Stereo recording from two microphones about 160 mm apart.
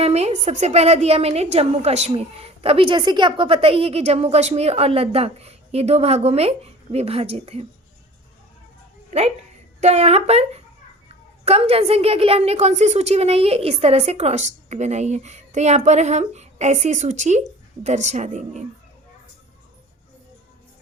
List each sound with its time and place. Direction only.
0.0 s a woman's voice: 40° right (ahead or behind)
9.0 s a sound: 40° right (ahead or behind)
9.8 s a woman's voice: 40° right (ahead or behind)